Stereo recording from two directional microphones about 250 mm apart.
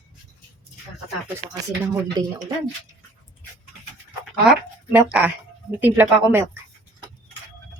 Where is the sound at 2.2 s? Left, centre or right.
Centre.